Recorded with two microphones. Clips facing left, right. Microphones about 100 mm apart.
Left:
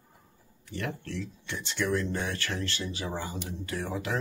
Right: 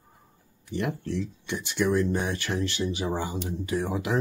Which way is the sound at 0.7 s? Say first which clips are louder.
Right 6 dB; 15° right (ahead or behind).